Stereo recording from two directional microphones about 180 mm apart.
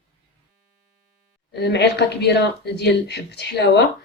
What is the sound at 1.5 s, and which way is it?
A woman's voice, 70° left (ahead or behind).